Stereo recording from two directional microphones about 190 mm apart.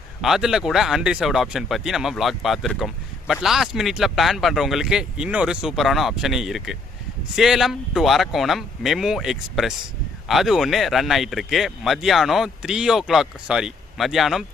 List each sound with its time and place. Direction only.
0.2 s speech: centre (ahead or behind)